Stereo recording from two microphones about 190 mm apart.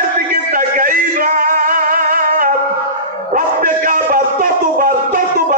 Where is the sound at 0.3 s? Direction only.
45° right (ahead or behind).